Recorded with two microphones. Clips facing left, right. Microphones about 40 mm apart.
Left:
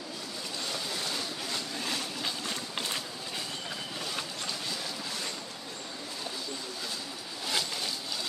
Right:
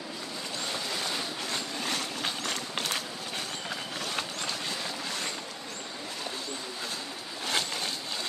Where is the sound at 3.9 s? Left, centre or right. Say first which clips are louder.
Right 3 dB; right.